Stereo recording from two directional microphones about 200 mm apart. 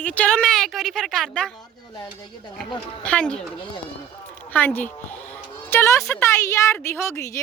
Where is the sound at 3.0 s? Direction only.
5° left (ahead or behind).